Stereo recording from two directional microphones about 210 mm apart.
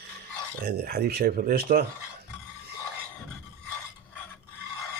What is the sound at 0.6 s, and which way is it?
Speech, 45° right (ahead or behind).